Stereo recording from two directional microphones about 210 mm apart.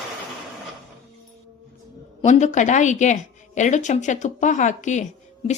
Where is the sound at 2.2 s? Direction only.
35° left (ahead or behind).